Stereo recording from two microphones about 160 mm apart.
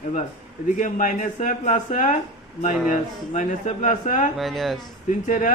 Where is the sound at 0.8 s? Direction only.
55° left (ahead or behind).